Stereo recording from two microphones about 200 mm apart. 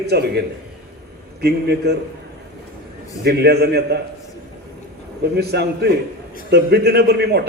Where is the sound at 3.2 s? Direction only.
55° right (ahead or behind).